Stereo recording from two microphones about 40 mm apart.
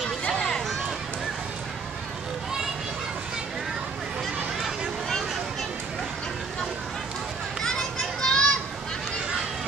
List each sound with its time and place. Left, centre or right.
0.3 s a sound: centre
4.6 s vehicle: centre
7.6 s children playing: centre